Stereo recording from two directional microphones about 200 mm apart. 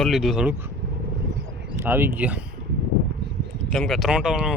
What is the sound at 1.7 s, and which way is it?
Speech, 10° right (ahead or behind).